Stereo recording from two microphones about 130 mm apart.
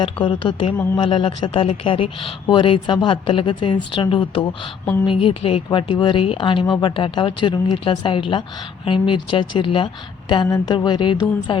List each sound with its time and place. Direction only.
0.0 s speech: 40° left (ahead or behind)